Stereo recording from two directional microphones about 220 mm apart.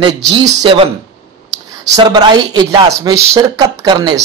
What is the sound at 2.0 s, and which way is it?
Speech, 20° right (ahead or behind).